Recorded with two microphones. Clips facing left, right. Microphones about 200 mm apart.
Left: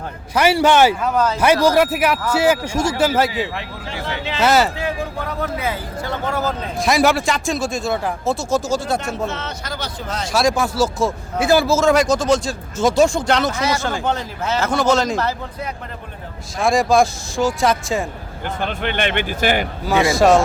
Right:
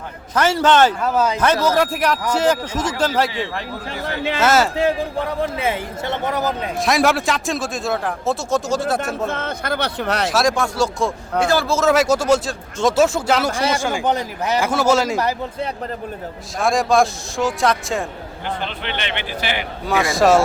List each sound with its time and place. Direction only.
0.3 s speech: 10° left (ahead or behind)
1.0 s speech: 5° right (ahead or behind)
1.6 s a man's voice: 5° left (ahead or behind)
4.0 s speech: 55° right (ahead or behind)
4.4 s a man's voice: centre (ahead or behind)
4.8 s a man's voice: 35° right (ahead or behind)
6.7 s a man's voice: centre (ahead or behind)
9.0 s speech: 55° right (ahead or behind)
10.2 s a man's voice: centre (ahead or behind)
16.6 s a man's voice: centre (ahead or behind)
18.6 s speech: 50° left (ahead or behind)
19.8 s a man's voice: centre (ahead or behind)